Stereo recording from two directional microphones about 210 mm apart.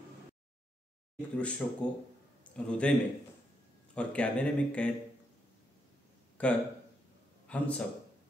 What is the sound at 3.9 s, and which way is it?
Speech, 5° left (ahead or behind).